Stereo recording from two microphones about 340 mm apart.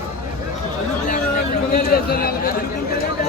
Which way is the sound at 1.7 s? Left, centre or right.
Left.